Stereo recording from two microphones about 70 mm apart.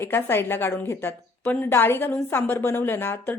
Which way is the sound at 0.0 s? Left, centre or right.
Left.